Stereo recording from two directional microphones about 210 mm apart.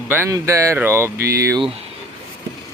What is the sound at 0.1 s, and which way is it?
Speech, 15° right (ahead or behind).